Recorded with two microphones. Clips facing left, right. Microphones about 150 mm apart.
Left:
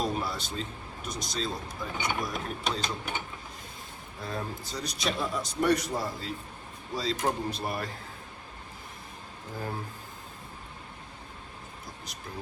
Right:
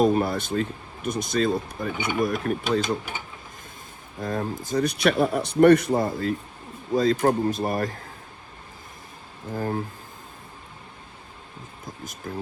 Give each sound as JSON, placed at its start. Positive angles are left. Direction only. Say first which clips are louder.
{"t": 0.0, "sound": "speech", "louder": "right 10 dB", "side_deg": -55}
{"t": 4.2, "sound": "speech", "louder": "right 8 dB", "side_deg": -45}
{"t": 12.3, "sound": "speech", "louder": "right 8 dB", "side_deg": -45}